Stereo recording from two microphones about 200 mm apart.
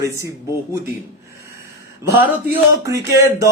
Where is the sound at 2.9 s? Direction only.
15° right (ahead or behind).